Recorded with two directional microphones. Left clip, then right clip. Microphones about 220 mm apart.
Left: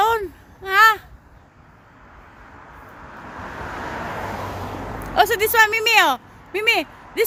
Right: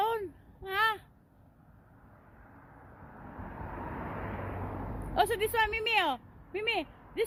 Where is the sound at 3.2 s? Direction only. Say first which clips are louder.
Left 12 dB; 45° right (ahead or behind).